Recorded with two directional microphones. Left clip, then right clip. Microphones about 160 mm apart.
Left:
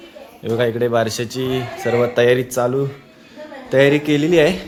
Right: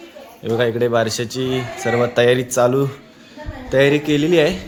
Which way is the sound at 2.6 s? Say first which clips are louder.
Right 3 dB; 15° right (ahead or behind).